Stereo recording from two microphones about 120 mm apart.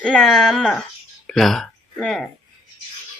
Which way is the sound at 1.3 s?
5° left (ahead or behind).